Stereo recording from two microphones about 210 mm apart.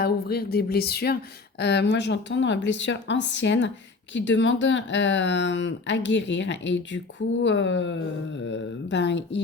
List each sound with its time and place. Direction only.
0.0 s speech: 50° left (ahead or behind)